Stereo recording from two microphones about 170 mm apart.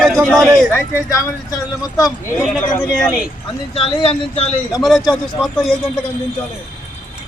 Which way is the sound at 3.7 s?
30° left (ahead or behind).